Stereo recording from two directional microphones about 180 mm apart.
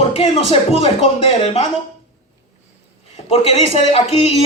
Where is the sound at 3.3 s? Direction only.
35° left (ahead or behind).